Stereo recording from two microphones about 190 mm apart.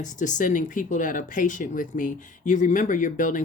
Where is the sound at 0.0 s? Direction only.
40° left (ahead or behind).